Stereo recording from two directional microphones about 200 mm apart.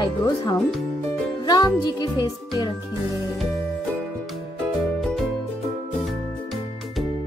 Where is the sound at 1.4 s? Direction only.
20° left (ahead or behind).